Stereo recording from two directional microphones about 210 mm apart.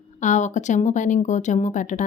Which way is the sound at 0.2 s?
35° left (ahead or behind).